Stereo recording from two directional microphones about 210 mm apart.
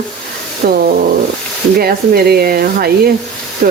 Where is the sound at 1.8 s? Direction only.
45° right (ahead or behind).